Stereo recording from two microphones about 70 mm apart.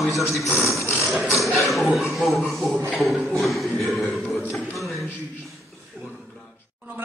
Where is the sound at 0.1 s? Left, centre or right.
Left.